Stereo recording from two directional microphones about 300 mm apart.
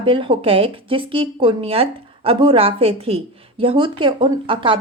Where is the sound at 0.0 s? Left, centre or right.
Centre.